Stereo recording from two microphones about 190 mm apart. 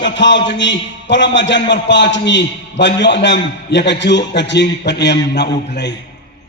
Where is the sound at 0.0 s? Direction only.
70° left (ahead or behind).